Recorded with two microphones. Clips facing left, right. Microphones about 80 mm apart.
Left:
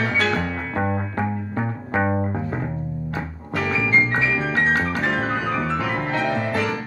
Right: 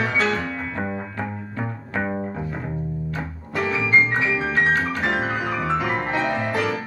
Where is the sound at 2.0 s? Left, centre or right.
Left.